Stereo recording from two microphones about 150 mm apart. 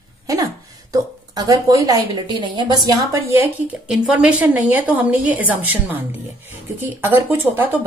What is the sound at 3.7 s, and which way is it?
A woman's voice, 5° right (ahead or behind).